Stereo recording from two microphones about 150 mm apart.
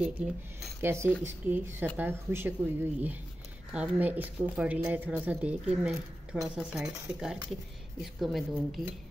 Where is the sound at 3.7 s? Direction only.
5° right (ahead or behind).